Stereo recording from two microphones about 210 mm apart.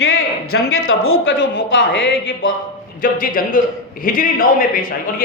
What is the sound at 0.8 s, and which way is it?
A woman's voice, 75° left (ahead or behind).